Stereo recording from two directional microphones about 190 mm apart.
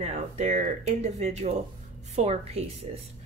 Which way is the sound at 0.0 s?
35° right (ahead or behind).